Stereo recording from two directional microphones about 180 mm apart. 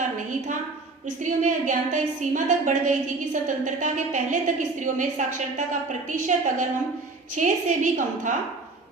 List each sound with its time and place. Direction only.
1.0 s a woman's voice: 45° right (ahead or behind)